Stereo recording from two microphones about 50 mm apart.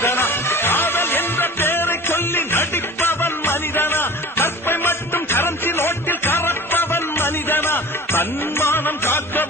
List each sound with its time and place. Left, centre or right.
0.0 s music: left